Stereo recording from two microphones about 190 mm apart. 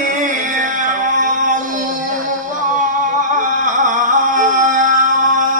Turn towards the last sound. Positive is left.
turn(degrees=-45)  # may be behind; listen again after turning